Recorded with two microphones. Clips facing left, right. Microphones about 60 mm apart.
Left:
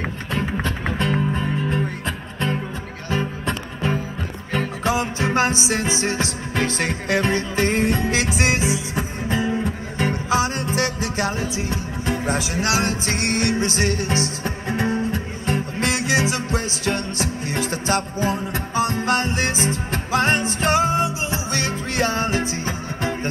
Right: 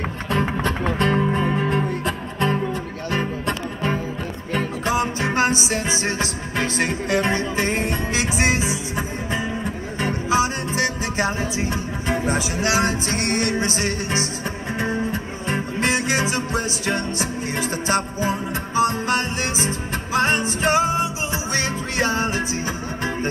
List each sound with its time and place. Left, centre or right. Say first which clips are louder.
0.4 s music: right 2 dB; right
1.3 s music: right 3 dB; right
3.1 s music: even; right
19.1 s music: left 1 dB; left
19.7 s music: left 1 dB; right